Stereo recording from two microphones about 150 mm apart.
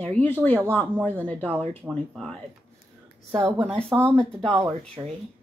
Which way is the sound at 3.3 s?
15° right (ahead or behind).